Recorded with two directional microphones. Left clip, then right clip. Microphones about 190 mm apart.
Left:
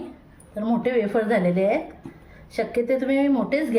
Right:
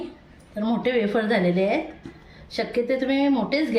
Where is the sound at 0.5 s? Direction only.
25° left (ahead or behind).